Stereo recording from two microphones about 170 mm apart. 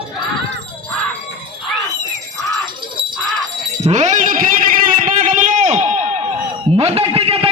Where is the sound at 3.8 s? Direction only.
45° right (ahead or behind).